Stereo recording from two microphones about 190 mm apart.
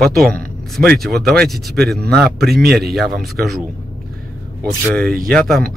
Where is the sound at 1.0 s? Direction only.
Centre (ahead or behind).